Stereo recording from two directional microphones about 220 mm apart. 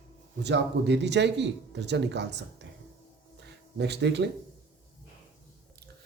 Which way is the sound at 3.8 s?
50° right (ahead or behind).